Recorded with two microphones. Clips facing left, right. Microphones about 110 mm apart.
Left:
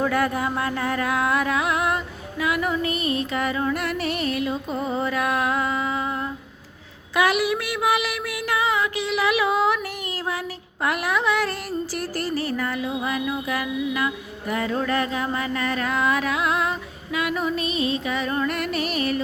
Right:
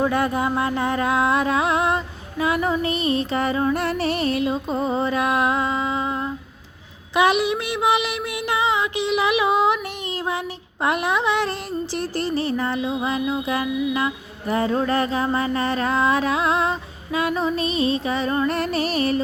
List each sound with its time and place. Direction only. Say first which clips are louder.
0.0 s music: right 2 dB; 20° right (ahead or behind)
7.2 s music: right 2 dB; 20° right (ahead or behind)
10.8 s music: right 2 dB; 25° right (ahead or behind)